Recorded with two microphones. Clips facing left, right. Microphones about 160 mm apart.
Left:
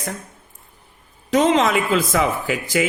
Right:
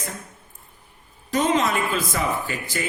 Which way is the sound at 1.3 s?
90° left.